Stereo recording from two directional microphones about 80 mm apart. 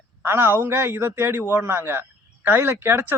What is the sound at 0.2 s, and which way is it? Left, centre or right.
A man's voice, right.